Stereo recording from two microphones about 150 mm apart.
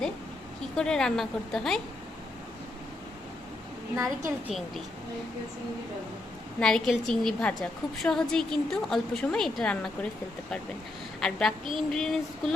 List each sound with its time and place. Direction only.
0.8 s a woman's voice: 5° left (ahead or behind)
3.9 s a woman's voice: 20° right (ahead or behind)
6.6 s a woman's voice: 5° left (ahead or behind)
11.2 s a woman's voice: 5° left (ahead or behind)